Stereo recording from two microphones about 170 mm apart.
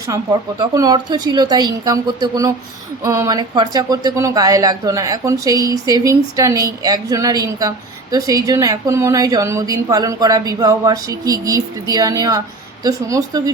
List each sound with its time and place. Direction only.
0.6 s a woman's voice: 20° right (ahead or behind)